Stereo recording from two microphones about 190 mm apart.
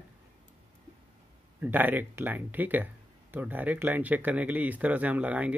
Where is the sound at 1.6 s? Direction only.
10° right (ahead or behind).